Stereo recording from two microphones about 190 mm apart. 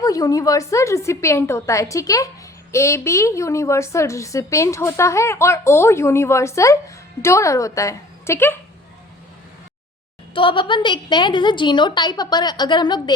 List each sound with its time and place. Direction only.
0.0 s a woman's voice: 20° left (ahead or behind)
10.3 s a woman's voice: 25° left (ahead or behind)